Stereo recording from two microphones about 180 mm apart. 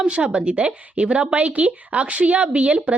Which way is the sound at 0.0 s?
5° right (ahead or behind).